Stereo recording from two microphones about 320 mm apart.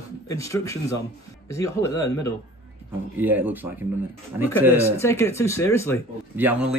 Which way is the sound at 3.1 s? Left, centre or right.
Centre.